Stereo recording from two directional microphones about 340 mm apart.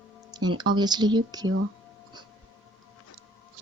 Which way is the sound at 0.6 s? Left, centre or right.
Centre.